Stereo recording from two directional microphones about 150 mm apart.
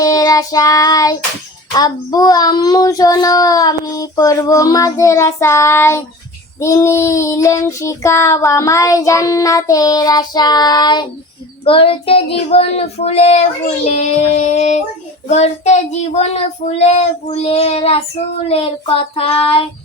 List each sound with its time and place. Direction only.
0.0 s child singing: 25° left (ahead or behind)